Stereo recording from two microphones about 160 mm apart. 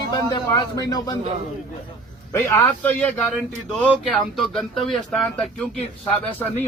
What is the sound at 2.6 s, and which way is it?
Speech, 10° left (ahead or behind).